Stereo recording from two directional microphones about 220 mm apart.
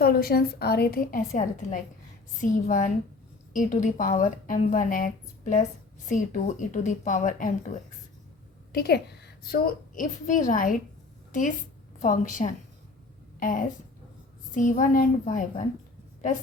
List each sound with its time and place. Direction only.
0.0 s a woman's voice: 45° left (ahead or behind)